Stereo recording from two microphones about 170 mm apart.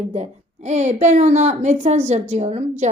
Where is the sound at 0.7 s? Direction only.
45° right (ahead or behind).